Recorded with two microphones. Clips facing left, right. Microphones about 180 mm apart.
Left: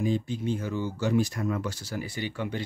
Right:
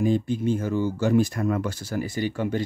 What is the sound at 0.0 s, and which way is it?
Speech, 50° right (ahead or behind).